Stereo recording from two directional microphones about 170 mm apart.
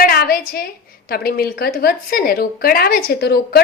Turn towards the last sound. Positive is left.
turn(degrees=70)  # may be behind; listen again after turning